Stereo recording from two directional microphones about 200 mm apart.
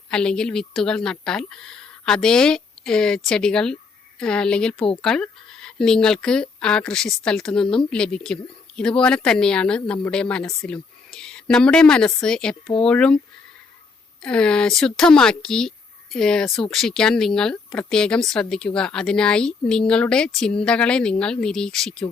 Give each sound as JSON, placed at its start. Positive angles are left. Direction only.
{"t": 0.1, "sound": "speech", "side_deg": 5}
{"t": 14.2, "sound": "speech", "side_deg": 5}